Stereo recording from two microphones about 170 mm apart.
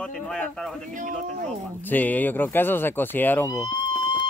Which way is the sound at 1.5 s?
10° left (ahead or behind).